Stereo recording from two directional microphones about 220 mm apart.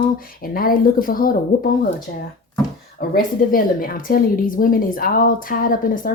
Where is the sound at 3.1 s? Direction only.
40° left (ahead or behind).